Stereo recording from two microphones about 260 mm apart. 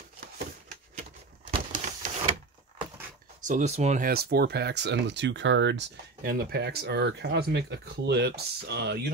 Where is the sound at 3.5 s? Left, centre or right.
Right.